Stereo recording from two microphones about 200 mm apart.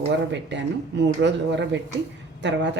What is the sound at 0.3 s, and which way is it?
A woman's voice, 60° right (ahead or behind).